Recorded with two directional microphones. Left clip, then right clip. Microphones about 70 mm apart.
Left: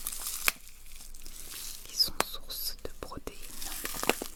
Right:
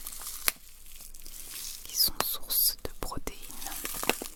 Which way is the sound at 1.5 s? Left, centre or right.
Centre.